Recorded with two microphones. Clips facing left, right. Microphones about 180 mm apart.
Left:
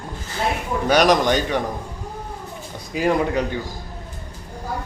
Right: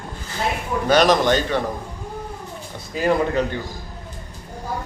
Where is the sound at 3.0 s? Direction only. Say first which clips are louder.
Even; 10° left (ahead or behind).